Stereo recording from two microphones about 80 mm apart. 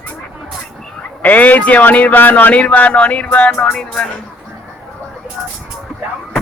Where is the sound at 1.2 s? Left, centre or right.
Centre.